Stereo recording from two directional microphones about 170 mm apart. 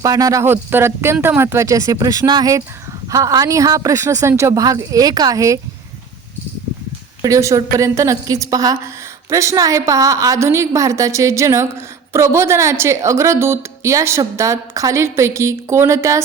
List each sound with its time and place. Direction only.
0.0 s speech: 20° right (ahead or behind)
7.2 s a woman's voice: 20° right (ahead or behind)